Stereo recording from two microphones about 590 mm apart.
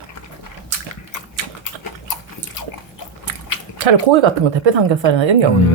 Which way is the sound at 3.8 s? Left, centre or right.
Right.